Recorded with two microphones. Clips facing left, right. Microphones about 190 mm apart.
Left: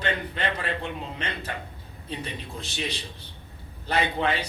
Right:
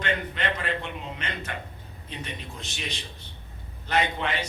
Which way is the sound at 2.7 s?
30° left (ahead or behind).